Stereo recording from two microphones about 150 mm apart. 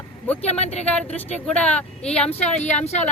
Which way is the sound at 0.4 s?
45° left (ahead or behind).